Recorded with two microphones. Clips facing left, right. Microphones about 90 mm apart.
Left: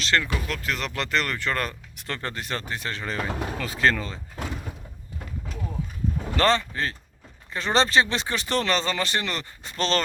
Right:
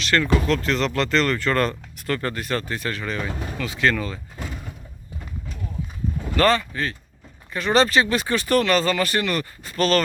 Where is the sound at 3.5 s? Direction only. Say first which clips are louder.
Right 2 dB; 40° left (ahead or behind).